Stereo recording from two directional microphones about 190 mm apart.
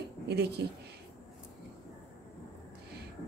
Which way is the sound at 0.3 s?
60° right (ahead or behind).